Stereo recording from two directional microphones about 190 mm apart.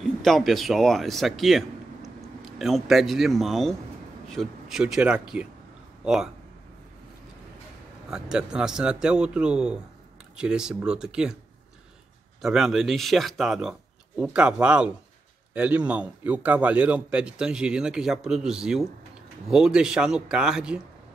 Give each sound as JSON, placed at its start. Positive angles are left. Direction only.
{"t": 0.0, "sound": "a man's voice", "side_deg": 0}
{"t": 8.1, "sound": "a man's voice", "side_deg": -5}
{"t": 12.4, "sound": "a man's voice", "side_deg": 0}